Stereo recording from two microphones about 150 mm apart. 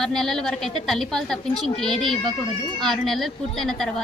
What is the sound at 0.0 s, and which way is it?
A woman's voice, 5° left (ahead or behind).